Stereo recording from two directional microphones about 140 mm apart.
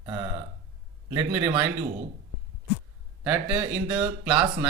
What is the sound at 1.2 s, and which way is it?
Speech, 35° right (ahead or behind).